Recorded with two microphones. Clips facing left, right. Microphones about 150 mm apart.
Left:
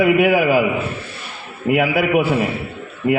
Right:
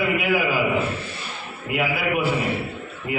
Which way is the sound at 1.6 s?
55° left (ahead or behind).